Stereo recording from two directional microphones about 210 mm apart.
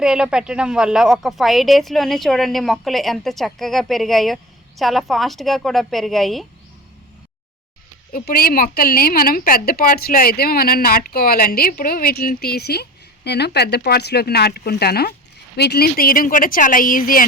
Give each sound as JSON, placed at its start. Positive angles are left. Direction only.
{"t": 0.0, "sound": "speech", "side_deg": -5}
{"t": 8.1, "sound": "a woman's voice", "side_deg": 45}